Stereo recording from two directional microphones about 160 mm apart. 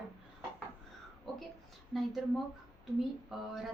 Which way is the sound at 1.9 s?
Centre (ahead or behind).